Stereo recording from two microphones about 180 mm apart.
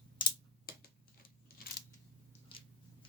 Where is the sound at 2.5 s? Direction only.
30° left (ahead or behind).